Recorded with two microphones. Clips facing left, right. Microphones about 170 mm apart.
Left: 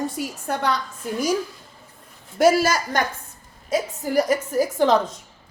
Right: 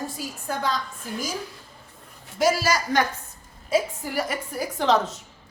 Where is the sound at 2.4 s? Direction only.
50° left (ahead or behind).